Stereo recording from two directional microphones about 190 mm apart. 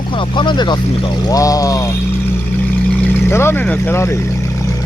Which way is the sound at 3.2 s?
10° left (ahead or behind).